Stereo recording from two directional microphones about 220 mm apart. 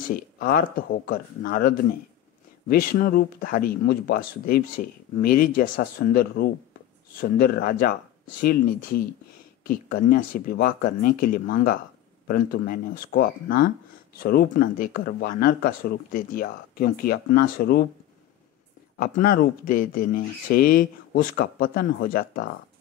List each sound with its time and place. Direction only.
0.1 s speech: 40° left (ahead or behind)
18.9 s speech: 40° left (ahead or behind)